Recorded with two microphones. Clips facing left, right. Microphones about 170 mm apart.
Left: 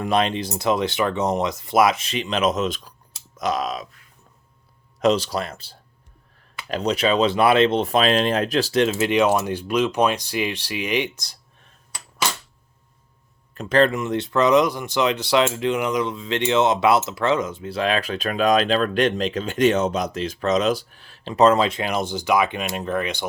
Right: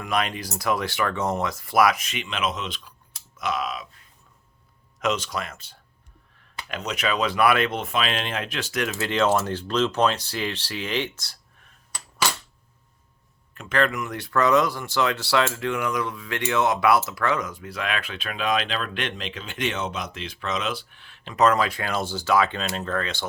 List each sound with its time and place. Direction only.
0.0 s speech: 30° left (ahead or behind)
4.9 s speech: 35° left (ahead or behind); by 11.3 s 15° left (ahead or behind)
13.5 s speech: 35° left (ahead or behind); by 23.2 s 15° left (ahead or behind)